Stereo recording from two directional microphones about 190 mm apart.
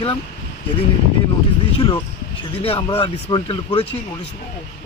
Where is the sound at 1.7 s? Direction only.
25° left (ahead or behind).